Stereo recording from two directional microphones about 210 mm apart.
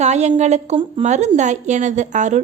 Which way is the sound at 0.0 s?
30° right (ahead or behind).